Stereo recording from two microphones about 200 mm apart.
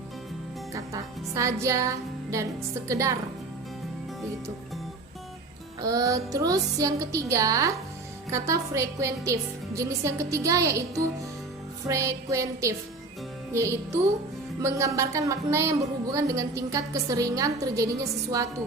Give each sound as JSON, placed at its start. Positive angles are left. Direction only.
{"t": 0.7, "sound": "a woman's voice", "side_deg": -15}
{"t": 5.8, "sound": "a woman's voice", "side_deg": -15}